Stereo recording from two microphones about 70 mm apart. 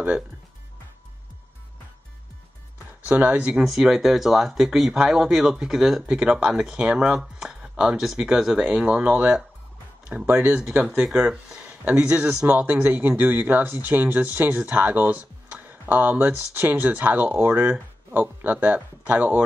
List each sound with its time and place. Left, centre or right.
3.1 s speech: centre
3.6 s speech: centre; by 10.6 s right
11.1 s speech: centre